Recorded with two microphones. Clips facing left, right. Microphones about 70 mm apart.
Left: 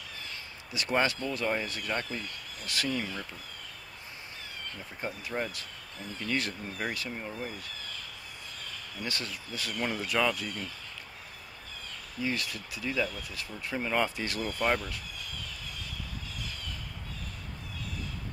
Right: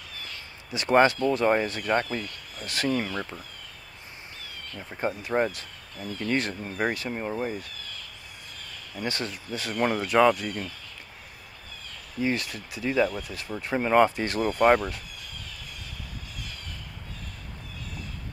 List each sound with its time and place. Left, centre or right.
0.7 s speech: right
5.0 s speech: right
9.0 s speech: right
12.2 s speech: right